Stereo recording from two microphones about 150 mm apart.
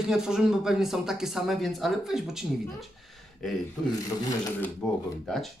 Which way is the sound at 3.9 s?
25° left (ahead or behind).